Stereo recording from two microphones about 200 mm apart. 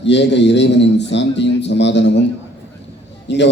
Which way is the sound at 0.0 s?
60° left (ahead or behind).